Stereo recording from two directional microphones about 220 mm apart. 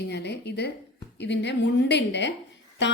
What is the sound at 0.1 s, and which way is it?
A woman's voice, 50° left (ahead or behind).